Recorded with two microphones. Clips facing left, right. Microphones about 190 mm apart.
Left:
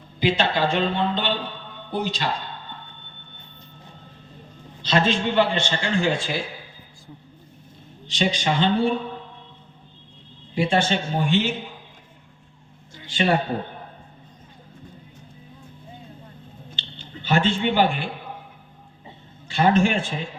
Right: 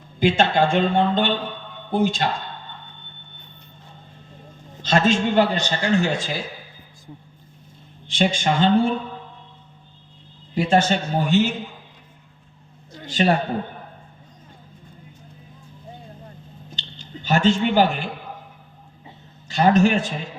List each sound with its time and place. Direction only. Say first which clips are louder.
0.2 s a man's voice: right 3 dB; 50° right (ahead or behind)
4.8 s a man's voice: right 3 dB; 45° right (ahead or behind)
8.0 s a man's voice: right 2 dB; 50° right (ahead or behind)
10.5 s a man's voice: right 3 dB; 40° right (ahead or behind)
12.9 s a sound: right 2 dB; 40° right (ahead or behind)
16.7 s a sound: right 4 dB; 45° right (ahead or behind)
19.5 s a man's voice: right 2 dB; 40° right (ahead or behind)